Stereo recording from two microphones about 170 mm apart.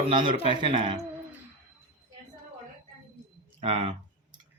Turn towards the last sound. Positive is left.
turn(degrees=-35)  # may be behind; listen again after turning